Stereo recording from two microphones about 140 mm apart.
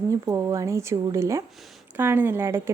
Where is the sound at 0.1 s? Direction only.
20° right (ahead or behind).